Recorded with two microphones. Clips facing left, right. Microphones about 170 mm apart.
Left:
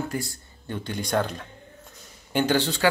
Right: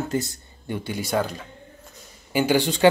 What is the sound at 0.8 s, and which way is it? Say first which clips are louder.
Speech: even; 5° right (ahead or behind).